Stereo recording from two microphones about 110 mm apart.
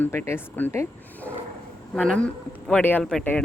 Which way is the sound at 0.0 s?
20° left (ahead or behind).